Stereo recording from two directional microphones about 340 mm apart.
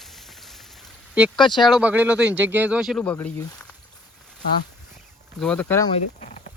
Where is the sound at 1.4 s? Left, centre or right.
Centre.